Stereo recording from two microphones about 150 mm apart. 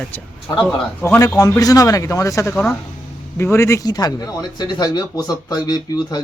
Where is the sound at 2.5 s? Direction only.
10° left (ahead or behind); by 6.2 s 25° left (ahead or behind).